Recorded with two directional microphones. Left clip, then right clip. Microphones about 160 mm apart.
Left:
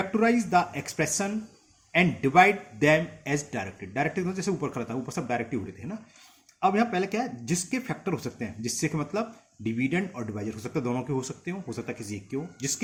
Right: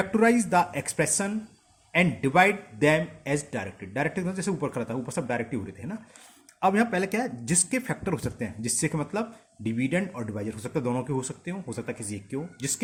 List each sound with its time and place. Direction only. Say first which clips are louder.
0.0 s a man's voice: right 2 dB; 30° right (ahead or behind)
6.6 s a man's voice: right 1 dB; 30° right (ahead or behind)